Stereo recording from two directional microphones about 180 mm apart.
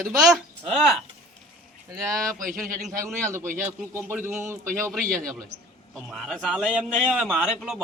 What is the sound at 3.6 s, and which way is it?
Speech, 10° right (ahead or behind).